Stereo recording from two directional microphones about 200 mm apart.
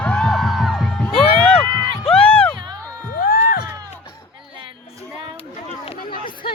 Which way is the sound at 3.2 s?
45° left (ahead or behind).